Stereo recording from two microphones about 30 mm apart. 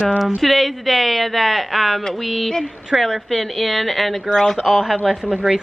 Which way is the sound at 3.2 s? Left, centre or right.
Centre.